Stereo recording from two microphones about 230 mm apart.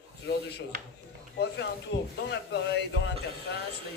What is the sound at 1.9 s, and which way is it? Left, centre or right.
A man's voice, left.